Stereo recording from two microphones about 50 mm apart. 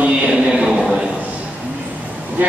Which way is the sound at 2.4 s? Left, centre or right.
Right.